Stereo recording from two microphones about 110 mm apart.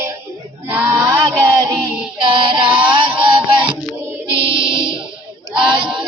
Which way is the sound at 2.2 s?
50° right (ahead or behind).